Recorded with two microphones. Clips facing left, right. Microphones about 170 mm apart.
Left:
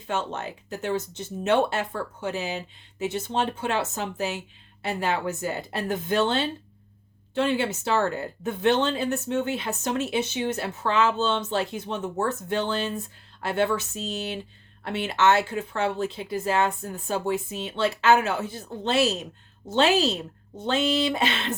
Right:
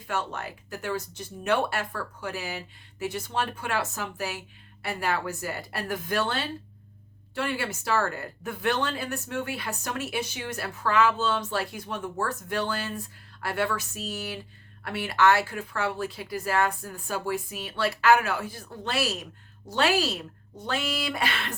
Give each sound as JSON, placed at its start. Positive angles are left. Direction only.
{"t": 0.1, "sound": "speech", "side_deg": 25}